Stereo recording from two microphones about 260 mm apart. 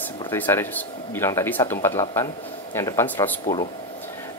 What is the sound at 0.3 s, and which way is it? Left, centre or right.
Speech, centre.